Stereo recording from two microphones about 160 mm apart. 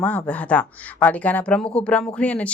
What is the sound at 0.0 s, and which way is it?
Speech, 10° left (ahead or behind).